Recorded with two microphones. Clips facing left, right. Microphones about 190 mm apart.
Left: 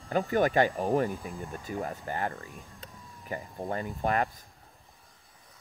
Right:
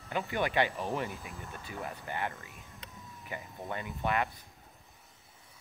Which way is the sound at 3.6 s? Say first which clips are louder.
Left 4 dB; 40° left (ahead or behind).